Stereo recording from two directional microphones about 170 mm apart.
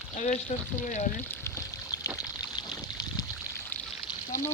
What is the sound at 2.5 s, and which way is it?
Boat, 20° left (ahead or behind).